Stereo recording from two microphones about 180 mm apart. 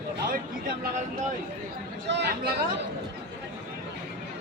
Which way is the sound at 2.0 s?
75° right (ahead or behind).